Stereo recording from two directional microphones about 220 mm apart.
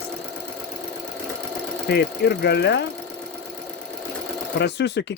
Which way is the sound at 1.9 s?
50° left (ahead or behind).